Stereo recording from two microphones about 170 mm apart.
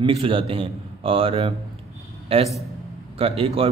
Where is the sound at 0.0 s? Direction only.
30° right (ahead or behind).